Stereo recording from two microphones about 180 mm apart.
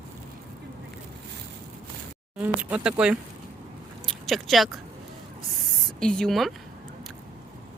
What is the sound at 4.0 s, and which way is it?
Biting, centre (ahead or behind).